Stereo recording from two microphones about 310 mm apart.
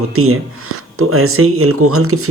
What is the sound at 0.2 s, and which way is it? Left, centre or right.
Speech, right.